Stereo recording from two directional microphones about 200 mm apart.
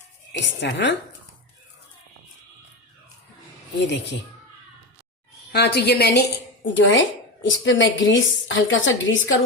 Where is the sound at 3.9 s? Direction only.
60° left (ahead or behind).